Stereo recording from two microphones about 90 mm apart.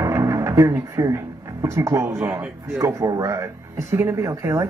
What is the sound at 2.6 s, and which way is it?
Speech, 30° right (ahead or behind).